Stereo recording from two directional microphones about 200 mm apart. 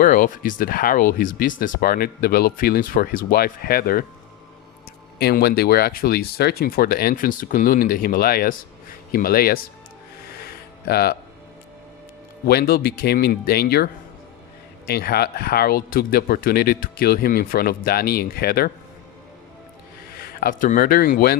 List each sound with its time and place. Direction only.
0.0 s speech: 45° left (ahead or behind)
5.2 s speech: 50° left (ahead or behind)
10.4 s music: 50° left (ahead or behind)
12.5 s speech: 50° left (ahead or behind)
20.4 s speech: 40° left (ahead or behind)